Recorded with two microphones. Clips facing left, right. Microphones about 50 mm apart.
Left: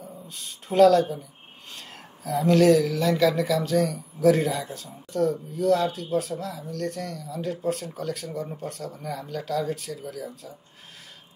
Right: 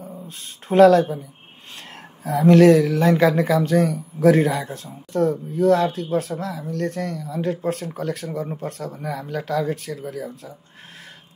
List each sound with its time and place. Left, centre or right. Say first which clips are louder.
0.3 s speech: right 7 dB; right
2.2 s speech: right 6 dB; right